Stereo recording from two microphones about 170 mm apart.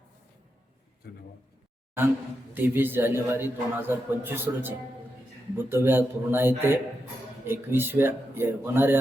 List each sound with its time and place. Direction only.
1.0 s a man's voice: 65° left (ahead or behind)
2.6 s a man's voice: 10° right (ahead or behind)